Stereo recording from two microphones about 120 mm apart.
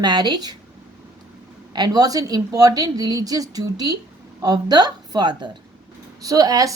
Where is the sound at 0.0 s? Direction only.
35° right (ahead or behind).